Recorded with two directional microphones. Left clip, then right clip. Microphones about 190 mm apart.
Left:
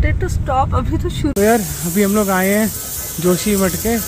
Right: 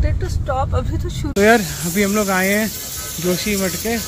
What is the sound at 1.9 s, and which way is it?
Speech, 10° left (ahead or behind).